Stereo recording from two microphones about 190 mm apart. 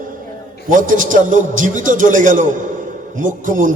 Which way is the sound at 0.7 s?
45° right (ahead or behind).